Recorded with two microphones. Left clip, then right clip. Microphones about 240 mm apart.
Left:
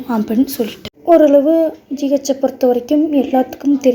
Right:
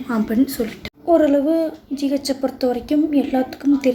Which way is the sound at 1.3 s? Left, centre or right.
Centre.